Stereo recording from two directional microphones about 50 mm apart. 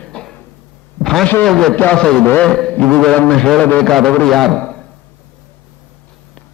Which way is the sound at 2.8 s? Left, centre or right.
Left.